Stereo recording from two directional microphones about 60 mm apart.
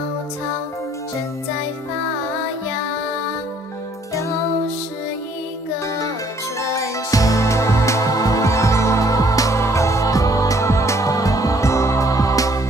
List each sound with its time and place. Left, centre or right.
6.6 s music: left